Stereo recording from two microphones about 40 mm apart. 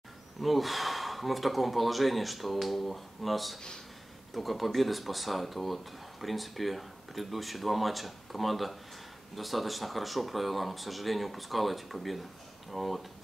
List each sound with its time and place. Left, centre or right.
0.4 s speech: centre